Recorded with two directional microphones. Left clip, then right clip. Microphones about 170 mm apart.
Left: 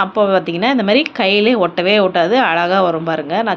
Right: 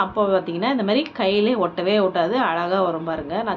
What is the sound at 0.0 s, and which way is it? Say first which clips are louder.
A woman's voice: left 6 dB; 20° left (ahead or behind).